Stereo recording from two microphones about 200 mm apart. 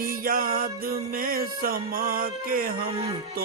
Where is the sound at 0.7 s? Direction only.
45° right (ahead or behind).